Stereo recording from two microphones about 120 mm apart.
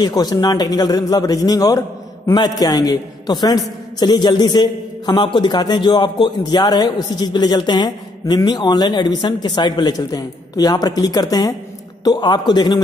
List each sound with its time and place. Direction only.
0.0 s a man's voice: 35° left (ahead or behind)